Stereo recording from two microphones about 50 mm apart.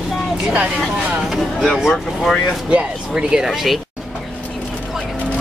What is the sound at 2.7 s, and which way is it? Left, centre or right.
Speech, right.